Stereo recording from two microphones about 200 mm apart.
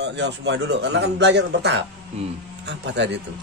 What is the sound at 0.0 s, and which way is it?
A man's voice, 60° right (ahead or behind).